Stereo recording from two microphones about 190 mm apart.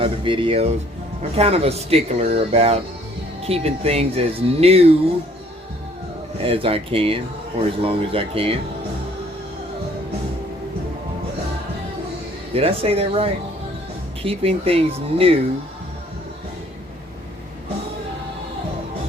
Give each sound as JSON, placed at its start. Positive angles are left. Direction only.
{"t": 0.0, "sound": "speech", "side_deg": -25}
{"t": 6.4, "sound": "speech", "side_deg": -30}
{"t": 12.5, "sound": "speech", "side_deg": -30}